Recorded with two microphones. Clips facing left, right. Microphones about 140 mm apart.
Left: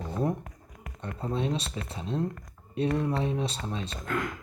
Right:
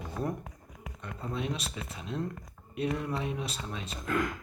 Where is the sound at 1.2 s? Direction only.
30° left (ahead or behind).